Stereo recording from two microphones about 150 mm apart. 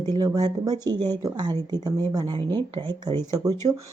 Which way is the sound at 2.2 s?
35° right (ahead or behind).